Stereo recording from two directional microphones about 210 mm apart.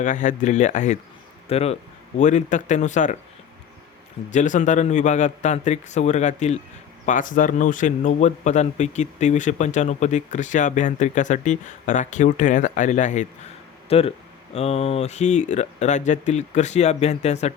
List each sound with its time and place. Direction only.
0.0 s a man's voice: 35° left (ahead or behind)
4.3 s a man's voice: 35° left (ahead or behind)